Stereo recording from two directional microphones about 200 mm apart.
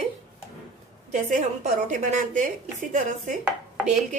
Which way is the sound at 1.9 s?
40° right (ahead or behind).